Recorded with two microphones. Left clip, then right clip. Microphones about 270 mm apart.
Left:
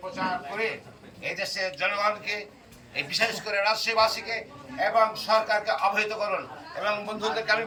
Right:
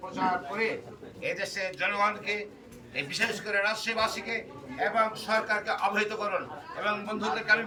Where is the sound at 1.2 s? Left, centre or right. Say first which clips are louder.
Left 2 dB; centre.